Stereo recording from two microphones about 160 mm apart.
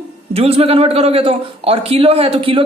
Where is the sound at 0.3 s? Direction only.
40° right (ahead or behind).